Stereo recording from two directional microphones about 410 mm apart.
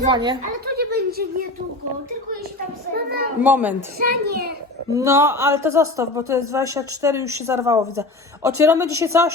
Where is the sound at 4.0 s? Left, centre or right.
Right.